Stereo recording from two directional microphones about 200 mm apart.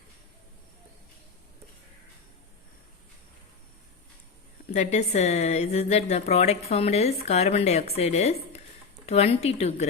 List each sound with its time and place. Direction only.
4.7 s speech: 35° left (ahead or behind)